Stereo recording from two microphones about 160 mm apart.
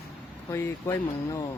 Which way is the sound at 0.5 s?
20° left (ahead or behind).